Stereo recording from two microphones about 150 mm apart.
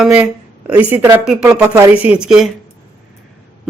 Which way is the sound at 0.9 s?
10° right (ahead or behind).